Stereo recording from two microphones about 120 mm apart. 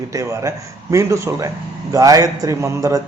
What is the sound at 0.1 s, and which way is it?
Speech, 25° right (ahead or behind).